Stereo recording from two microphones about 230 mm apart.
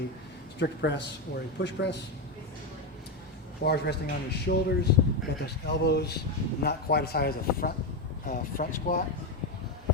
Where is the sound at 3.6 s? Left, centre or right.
Left.